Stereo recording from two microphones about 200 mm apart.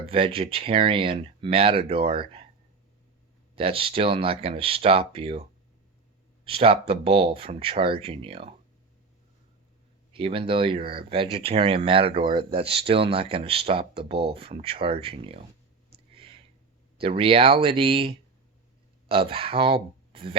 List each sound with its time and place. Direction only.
0.0 s speech: 30° right (ahead or behind)
3.5 s speech: 25° right (ahead or behind)
10.1 s speech: 25° right (ahead or behind)
16.1 s a sound: 30° right (ahead or behind)
17.0 s speech: 25° right (ahead or behind)